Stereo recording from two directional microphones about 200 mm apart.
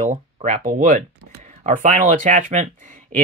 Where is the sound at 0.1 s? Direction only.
40° right (ahead or behind).